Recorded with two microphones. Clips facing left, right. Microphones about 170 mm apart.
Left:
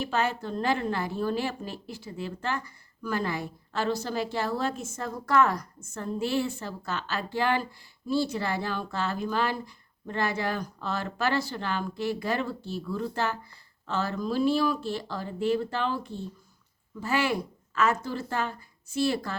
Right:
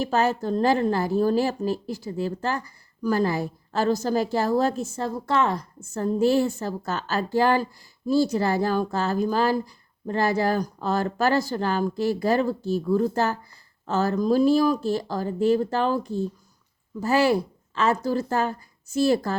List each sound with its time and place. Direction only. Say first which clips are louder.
0.0 s a woman's voice: right 6 dB; 40° right (ahead or behind)